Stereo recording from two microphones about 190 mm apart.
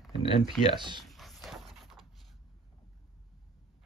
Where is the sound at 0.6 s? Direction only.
25° right (ahead or behind).